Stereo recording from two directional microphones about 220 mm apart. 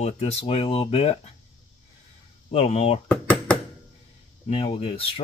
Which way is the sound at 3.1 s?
5° left (ahead or behind).